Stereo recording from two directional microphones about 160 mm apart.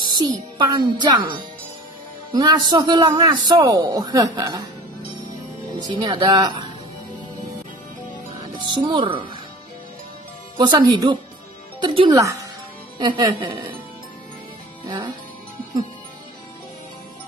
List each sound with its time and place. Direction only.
0.0 s a man's voice: 30° right (ahead or behind)
5.8 s a man's voice: 25° right (ahead or behind)
8.7 s a man's voice: 30° right (ahead or behind)
10.6 s a man's voice: 25° right (ahead or behind)